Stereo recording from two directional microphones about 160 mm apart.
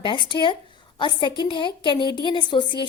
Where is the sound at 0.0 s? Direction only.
30° left (ahead or behind).